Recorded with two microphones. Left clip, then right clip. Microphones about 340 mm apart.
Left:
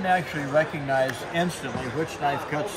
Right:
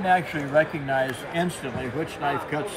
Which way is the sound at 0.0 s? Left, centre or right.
Centre.